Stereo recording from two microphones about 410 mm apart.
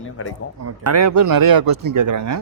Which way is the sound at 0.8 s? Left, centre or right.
Right.